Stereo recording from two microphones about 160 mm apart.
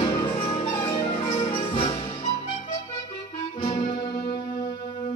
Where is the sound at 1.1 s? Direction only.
50° left (ahead or behind).